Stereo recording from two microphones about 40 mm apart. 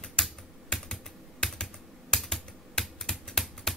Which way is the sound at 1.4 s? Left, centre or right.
Centre.